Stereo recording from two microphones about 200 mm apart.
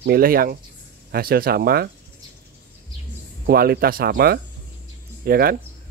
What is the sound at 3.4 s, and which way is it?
Speech, 50° right (ahead or behind).